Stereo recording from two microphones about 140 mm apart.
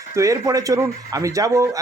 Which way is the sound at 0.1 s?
20° right (ahead or behind).